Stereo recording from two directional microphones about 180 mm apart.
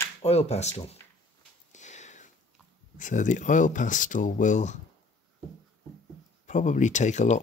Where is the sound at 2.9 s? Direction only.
45° left (ahead or behind).